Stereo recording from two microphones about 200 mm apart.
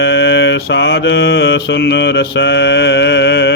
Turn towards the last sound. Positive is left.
turn(degrees=60)  # may be behind; listen again after turning